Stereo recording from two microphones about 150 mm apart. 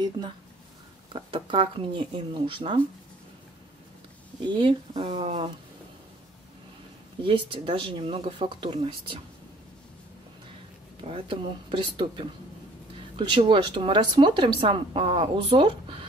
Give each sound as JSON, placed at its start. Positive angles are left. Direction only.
{"t": 1.1, "sound": "speech", "side_deg": -35}
{"t": 4.4, "sound": "speech", "side_deg": -30}
{"t": 7.2, "sound": "speech", "side_deg": -35}
{"t": 11.0, "sound": "speech", "side_deg": -35}